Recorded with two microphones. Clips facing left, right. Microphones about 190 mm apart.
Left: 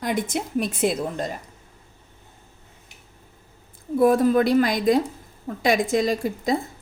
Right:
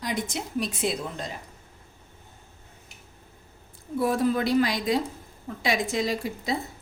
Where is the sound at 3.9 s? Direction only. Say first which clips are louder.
Left 7 dB; 50° left (ahead or behind).